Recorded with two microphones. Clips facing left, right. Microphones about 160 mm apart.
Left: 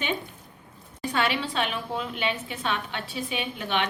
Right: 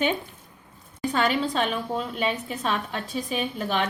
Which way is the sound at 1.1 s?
40° right (ahead or behind).